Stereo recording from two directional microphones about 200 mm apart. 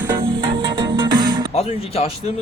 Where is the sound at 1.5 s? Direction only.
30° left (ahead or behind).